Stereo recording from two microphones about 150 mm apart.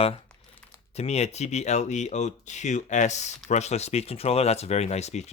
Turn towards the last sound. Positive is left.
turn(degrees=45)  # may be behind; listen again after turning